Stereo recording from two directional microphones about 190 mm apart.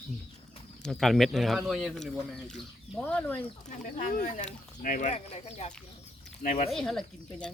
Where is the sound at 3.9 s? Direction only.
45° left (ahead or behind).